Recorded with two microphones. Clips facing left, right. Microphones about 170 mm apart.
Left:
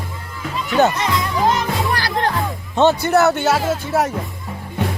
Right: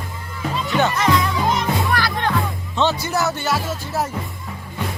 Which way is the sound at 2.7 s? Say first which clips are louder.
Left 7 dB; 50° left (ahead or behind).